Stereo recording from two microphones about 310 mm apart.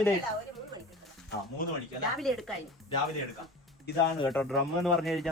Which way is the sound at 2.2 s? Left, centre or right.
Centre.